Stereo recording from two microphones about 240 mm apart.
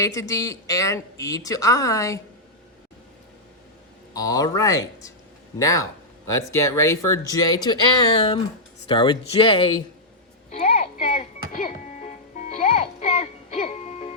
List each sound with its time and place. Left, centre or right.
0.0 s a woman's voice: centre
4.1 s a woman's voice: centre
10.5 s music: left